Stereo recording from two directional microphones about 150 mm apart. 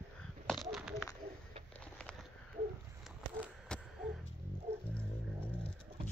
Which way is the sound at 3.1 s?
5° right (ahead or behind).